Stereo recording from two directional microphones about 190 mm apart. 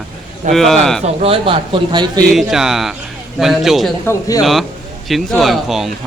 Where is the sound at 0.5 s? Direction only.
Centre (ahead or behind).